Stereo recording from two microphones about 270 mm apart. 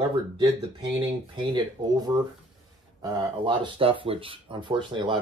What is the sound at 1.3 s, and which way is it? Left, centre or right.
Speech, centre.